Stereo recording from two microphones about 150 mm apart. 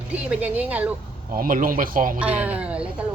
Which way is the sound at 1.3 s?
70° right (ahead or behind).